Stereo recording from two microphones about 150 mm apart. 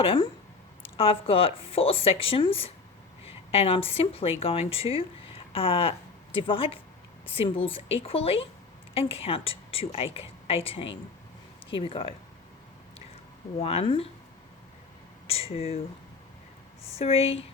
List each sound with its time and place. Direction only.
0.0 s speech: 35° left (ahead or behind)
13.6 s speech: 40° left (ahead or behind)
15.3 s speech: 40° left (ahead or behind)
17.0 s speech: 40° left (ahead or behind)